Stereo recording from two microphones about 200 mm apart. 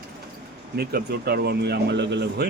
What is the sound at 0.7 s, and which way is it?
Speech, 55° right (ahead or behind).